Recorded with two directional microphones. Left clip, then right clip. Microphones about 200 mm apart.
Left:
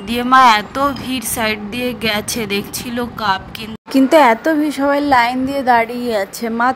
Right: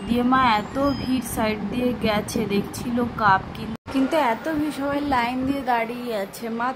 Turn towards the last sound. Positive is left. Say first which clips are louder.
# left 10 dB
turn(degrees=35)  # may be behind; listen again after turning